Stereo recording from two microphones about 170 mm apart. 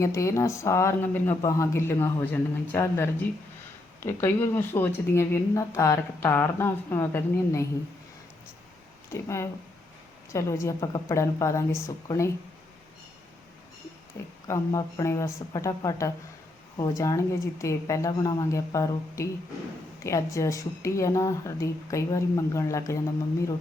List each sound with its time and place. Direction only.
0.0 s speech: 15° left (ahead or behind)
9.1 s speech: 15° left (ahead or behind)
14.4 s a woman's voice: 20° left (ahead or behind)